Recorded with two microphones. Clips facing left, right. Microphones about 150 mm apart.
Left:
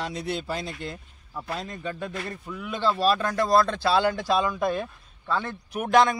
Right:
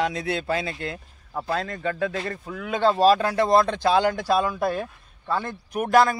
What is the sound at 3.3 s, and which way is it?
Speech, 25° right (ahead or behind).